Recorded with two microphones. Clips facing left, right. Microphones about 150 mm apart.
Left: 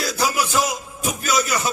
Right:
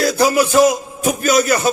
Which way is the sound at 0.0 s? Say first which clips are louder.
Right 8 dB; 55° right (ahead or behind).